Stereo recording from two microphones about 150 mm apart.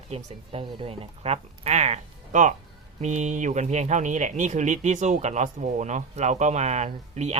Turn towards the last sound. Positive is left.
turn(degrees=-50)  # may be behind; listen again after turning